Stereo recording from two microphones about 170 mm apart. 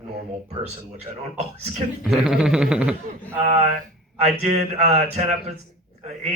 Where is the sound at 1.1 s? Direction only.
35° right (ahead or behind).